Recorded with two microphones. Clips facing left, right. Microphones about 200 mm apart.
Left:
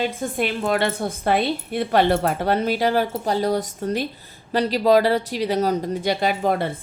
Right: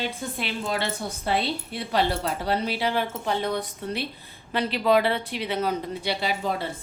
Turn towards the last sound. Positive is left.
turn(degrees=55)  # may be behind; listen again after turning